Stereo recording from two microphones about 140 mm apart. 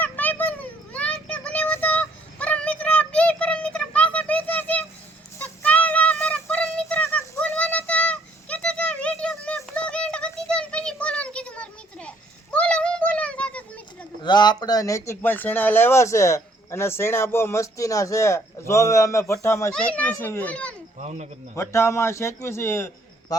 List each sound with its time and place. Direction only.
0.0 s a sound: 15° left (ahead or behind)
5.4 s music: 10° left (ahead or behind)
9.6 s a sound: 10° left (ahead or behind)
14.2 s speech: 30° left (ahead or behind)
19.7 s a child's voice: 10° left (ahead or behind)
21.0 s speech: 55° right (ahead or behind)
21.5 s speech: 20° left (ahead or behind)